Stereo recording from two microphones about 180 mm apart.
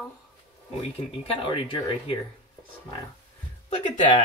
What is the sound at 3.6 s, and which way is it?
Speech, 40° left (ahead or behind).